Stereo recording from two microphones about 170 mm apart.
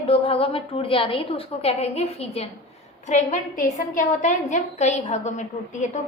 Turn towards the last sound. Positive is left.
turn(degrees=45)  # may be behind; listen again after turning